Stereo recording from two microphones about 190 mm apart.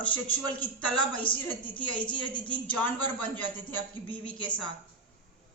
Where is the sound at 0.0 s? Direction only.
10° left (ahead or behind).